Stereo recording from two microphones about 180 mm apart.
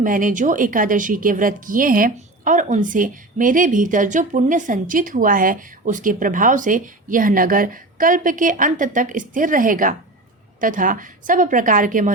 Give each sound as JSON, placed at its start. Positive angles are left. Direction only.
{"t": 0.0, "sound": "a woman's voice", "side_deg": -50}